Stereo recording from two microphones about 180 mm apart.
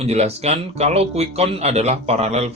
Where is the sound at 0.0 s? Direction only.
35° right (ahead or behind).